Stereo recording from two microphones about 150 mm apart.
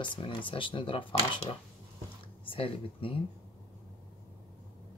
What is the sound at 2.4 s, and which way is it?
Speech, 40° left (ahead or behind).